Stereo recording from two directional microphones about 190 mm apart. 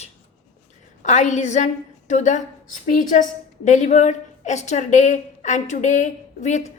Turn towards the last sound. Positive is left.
turn(degrees=40)  # may be behind; listen again after turning